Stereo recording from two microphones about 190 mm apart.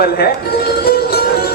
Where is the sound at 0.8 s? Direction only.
55° left (ahead or behind).